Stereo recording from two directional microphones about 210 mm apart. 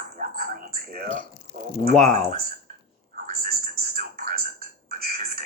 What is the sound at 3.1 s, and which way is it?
Television, 45° right (ahead or behind).